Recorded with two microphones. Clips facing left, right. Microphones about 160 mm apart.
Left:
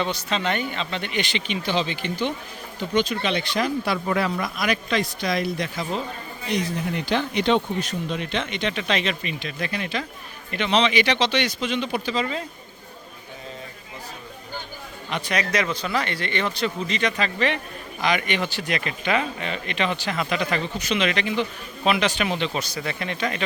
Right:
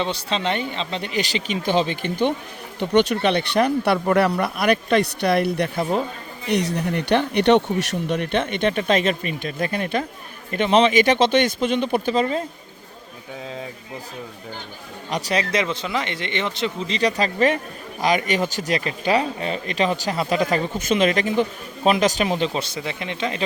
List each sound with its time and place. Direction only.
0.0 s speech: 30° right (ahead or behind); by 2.3 s 50° right (ahead or behind)
2.7 s speech: 65° right (ahead or behind)
6.5 s speech: 70° right (ahead or behind); by 12.2 s 50° right (ahead or behind)
12.2 s speech: 35° right (ahead or behind)
15.1 s speech: 35° right (ahead or behind)